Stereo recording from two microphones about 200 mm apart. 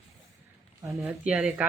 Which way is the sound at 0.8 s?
10° right (ahead or behind).